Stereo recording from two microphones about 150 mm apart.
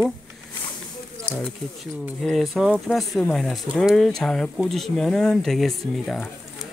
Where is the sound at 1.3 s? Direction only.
5° left (ahead or behind).